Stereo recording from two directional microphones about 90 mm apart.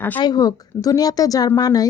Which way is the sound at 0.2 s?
50° left (ahead or behind).